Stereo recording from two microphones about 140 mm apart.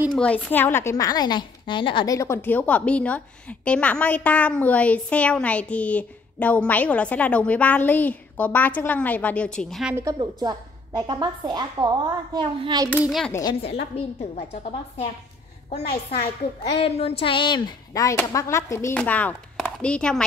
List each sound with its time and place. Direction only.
0.1 s a woman's voice: 10° left (ahead or behind); by 2.0 s 35° left (ahead or behind)
2.0 s a woman's voice: 20° left (ahead or behind); by 9.8 s 5° left (ahead or behind)
10.1 s a woman's voice: 30° right (ahead or behind)
13.3 s a woman's voice: 25° left (ahead or behind)
13.6 s a woman's voice: 45° left (ahead or behind)
15.7 s a woman's voice: 45° left (ahead or behind); by 20.2 s 5° left (ahead or behind)